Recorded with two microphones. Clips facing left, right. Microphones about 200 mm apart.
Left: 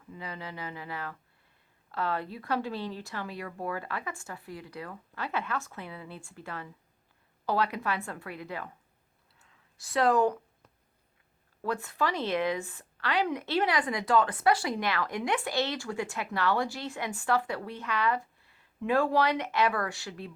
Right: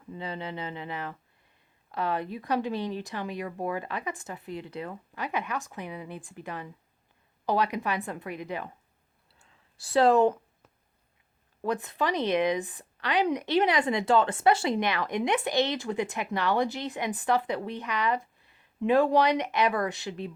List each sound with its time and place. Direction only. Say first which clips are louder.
0.1 s speech: right 5 dB; 25° right (ahead or behind)
9.4 s a sound: right 3 dB; 30° right (ahead or behind)
11.6 s speech: right 2 dB; 20° right (ahead or behind)